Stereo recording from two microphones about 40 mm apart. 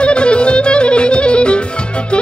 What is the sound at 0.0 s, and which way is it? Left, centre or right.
Music, left.